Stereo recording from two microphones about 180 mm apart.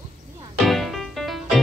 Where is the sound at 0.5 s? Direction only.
Centre (ahead or behind).